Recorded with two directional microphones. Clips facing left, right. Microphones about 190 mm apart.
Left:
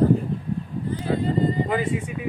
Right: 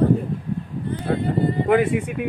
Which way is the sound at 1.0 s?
60° right (ahead or behind).